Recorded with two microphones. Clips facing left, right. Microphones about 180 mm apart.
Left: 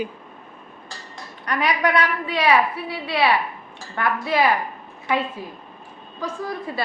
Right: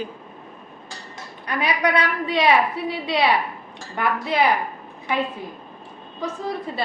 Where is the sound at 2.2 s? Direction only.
25° right (ahead or behind).